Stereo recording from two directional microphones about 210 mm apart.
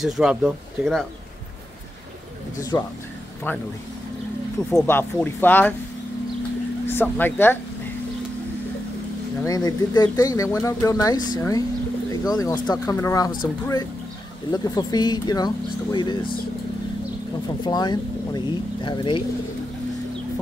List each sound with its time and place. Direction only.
0.0 s speech: centre (ahead or behind)
2.7 s speech: 15° left (ahead or behind)
4.7 s speech: 10° left (ahead or behind)
6.9 s speech: 10° left (ahead or behind)
9.4 s speech: 15° left (ahead or behind)
17.6 s speech: 20° left (ahead or behind)